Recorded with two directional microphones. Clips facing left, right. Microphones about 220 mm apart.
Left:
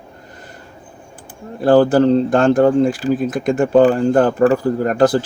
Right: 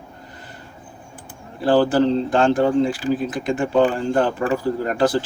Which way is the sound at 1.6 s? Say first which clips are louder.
Left 5 dB; 45° left (ahead or behind).